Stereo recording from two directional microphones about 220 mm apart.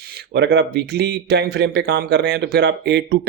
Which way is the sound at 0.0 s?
45° right (ahead or behind).